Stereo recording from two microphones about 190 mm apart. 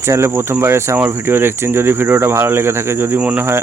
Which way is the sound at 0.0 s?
15° right (ahead or behind).